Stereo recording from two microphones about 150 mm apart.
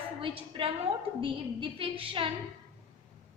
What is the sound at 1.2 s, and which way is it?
A woman's voice, 35° right (ahead or behind).